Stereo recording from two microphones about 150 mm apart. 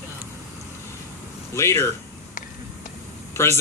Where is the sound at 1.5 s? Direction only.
20° left (ahead or behind).